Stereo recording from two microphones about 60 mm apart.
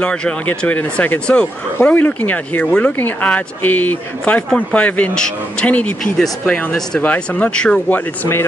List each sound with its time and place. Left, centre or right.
0.0 s a man's voice: centre
1.2 s a man's voice: centre
1.8 s speech: left
5.1 s a man's voice: centre
5.7 s speech: left
6.1 s a man's voice: centre
7.0 s speech: left